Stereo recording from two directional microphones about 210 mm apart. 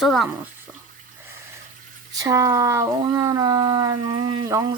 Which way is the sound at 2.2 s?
15° right (ahead or behind).